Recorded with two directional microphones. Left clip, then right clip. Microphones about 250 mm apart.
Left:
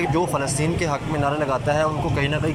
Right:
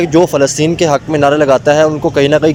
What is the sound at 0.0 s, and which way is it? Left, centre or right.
Speech, right.